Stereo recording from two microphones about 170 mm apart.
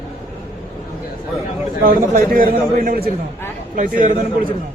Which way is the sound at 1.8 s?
55° right (ahead or behind).